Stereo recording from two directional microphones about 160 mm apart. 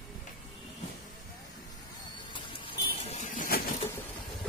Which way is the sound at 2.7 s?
35° left (ahead or behind).